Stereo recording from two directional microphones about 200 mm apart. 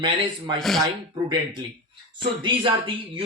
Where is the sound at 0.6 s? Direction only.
Centre (ahead or behind).